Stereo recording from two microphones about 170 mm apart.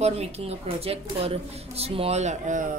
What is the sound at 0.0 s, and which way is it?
Speech, 35° right (ahead or behind).